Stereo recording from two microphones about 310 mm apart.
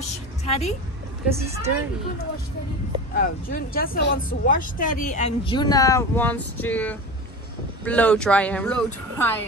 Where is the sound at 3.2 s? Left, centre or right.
Left.